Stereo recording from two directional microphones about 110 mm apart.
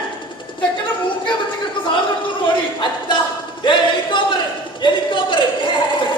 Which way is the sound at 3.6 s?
45° left (ahead or behind).